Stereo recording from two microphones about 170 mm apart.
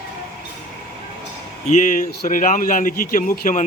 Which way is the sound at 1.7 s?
50° left (ahead or behind).